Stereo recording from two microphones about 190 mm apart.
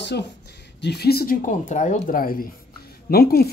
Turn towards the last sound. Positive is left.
turn(degrees=55)  # may be behind; listen again after turning